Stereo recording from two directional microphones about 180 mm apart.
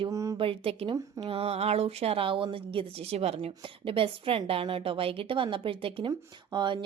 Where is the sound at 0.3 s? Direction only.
30° right (ahead or behind).